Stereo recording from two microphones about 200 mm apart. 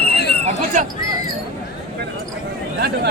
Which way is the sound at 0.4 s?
40° right (ahead or behind).